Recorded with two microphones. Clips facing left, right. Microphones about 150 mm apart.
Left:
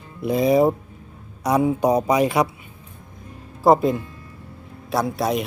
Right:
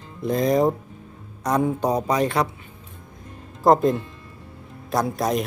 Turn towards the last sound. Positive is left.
turn(degrees=0)  # may be behind; listen again after turning